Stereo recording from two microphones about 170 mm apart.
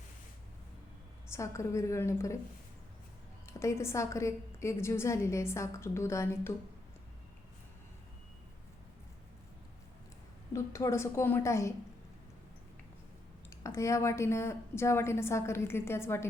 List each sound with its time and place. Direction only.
1.3 s a woman's voice: 15° left (ahead or behind)
3.4 s a woman's voice: 15° left (ahead or behind)
10.5 s a woman's voice: 20° left (ahead or behind)
13.5 s a woman's voice: 15° left (ahead or behind)